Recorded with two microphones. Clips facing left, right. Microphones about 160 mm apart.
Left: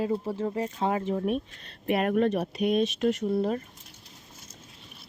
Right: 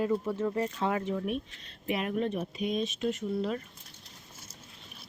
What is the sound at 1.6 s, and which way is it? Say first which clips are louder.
Speech: left 8 dB; 55° left (ahead or behind).